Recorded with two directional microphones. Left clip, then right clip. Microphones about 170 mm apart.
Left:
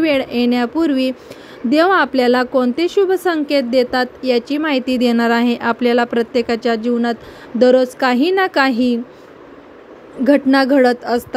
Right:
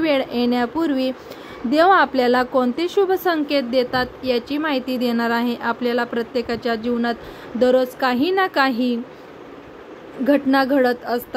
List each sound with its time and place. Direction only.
0.0 s a woman's voice: 40° left (ahead or behind)
10.2 s a woman's voice: 50° left (ahead or behind)